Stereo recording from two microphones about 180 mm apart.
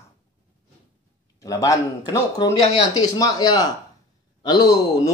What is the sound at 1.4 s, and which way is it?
Speech, 15° left (ahead or behind).